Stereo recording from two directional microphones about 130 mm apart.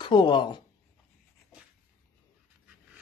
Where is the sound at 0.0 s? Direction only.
35° left (ahead or behind).